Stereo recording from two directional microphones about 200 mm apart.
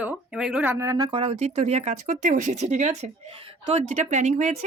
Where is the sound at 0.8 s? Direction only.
20° right (ahead or behind).